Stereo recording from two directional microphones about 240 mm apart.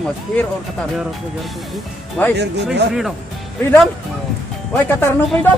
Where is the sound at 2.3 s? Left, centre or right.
Right.